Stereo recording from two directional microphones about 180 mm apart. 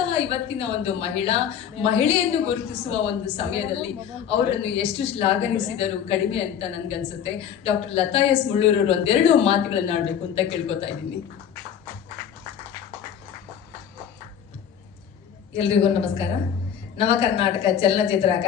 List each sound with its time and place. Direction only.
0.1 s a woman's voice: 35° left (ahead or behind)
15.5 s a woman's voice: 35° left (ahead or behind)